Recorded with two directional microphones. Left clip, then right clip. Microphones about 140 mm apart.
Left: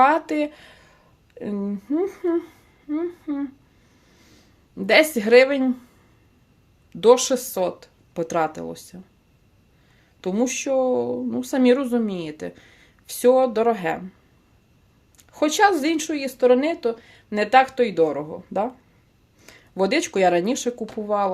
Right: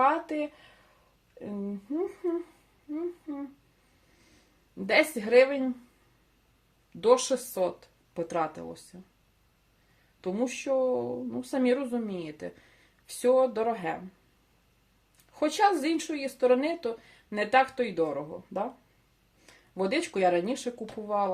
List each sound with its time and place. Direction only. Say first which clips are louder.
0.0 s speech: left 8 dB; 55° left (ahead or behind)
4.9 s speech: left 9 dB; 45° left (ahead or behind)
7.0 s speech: left 7 dB; 45° left (ahead or behind)
10.2 s speech: left 8 dB; 45° left (ahead or behind)
15.3 s speech: left 7 dB; 40° left (ahead or behind)